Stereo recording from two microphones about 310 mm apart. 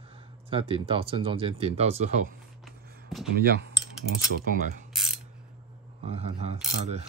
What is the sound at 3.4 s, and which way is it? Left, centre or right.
Cutlery, right.